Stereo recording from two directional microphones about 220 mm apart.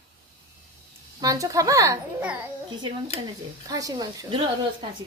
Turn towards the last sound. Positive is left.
turn(degrees=-20)  # may be behind; listen again after turning